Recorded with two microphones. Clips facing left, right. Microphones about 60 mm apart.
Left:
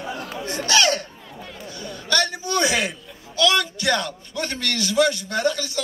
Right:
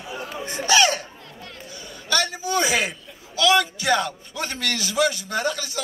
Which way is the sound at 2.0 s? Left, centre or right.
Centre.